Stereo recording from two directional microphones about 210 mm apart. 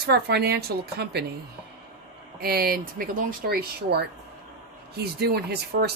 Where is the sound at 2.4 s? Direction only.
45° right (ahead or behind).